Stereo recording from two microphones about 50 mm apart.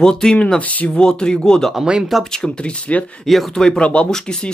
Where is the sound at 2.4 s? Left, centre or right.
Centre.